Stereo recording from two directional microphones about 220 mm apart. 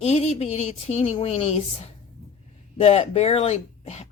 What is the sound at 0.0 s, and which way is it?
Speech, 30° left (ahead or behind).